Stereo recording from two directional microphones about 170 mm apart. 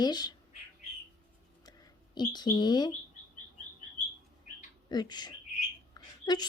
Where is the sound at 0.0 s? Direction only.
25° left (ahead or behind).